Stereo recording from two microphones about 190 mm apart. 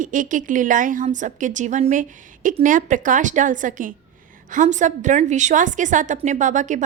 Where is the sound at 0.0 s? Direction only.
45° right (ahead or behind).